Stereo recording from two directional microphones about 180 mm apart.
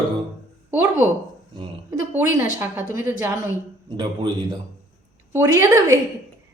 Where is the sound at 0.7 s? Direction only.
10° right (ahead or behind).